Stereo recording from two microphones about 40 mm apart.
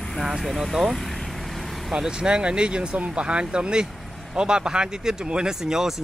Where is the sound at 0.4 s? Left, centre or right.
Centre.